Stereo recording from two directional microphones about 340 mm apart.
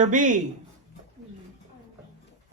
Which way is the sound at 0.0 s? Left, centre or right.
Right.